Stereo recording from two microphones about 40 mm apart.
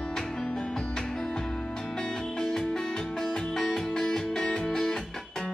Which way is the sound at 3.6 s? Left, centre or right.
Centre.